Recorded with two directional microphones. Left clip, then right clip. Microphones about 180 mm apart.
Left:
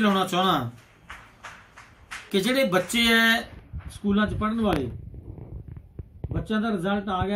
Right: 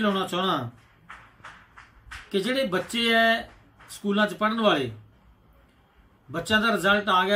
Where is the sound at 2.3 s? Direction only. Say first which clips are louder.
Left 3 dB; 5° left (ahead or behind).